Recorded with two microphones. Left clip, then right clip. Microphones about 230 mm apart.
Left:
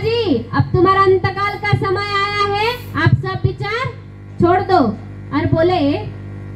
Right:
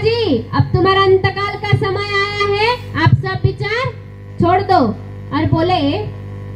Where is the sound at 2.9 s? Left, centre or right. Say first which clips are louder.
Right 2 dB; right.